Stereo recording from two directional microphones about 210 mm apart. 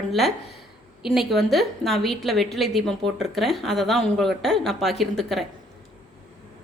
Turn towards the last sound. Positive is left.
turn(degrees=0)  # may be behind; listen again after turning